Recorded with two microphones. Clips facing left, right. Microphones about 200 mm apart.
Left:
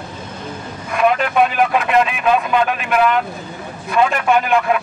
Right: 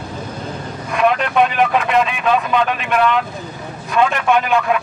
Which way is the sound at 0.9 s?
Centre (ahead or behind).